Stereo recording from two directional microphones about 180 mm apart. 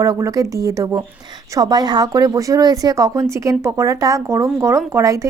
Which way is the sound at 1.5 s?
20° right (ahead or behind).